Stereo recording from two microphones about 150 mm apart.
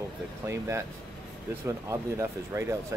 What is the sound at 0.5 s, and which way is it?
Speech, 15° right (ahead or behind).